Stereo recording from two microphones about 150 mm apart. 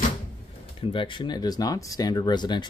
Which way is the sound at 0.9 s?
35° left (ahead or behind).